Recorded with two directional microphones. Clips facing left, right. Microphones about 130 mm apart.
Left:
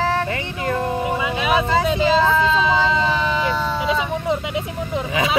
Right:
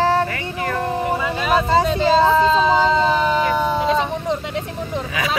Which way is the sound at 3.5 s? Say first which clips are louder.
Right 4 dB; 15° right (ahead or behind).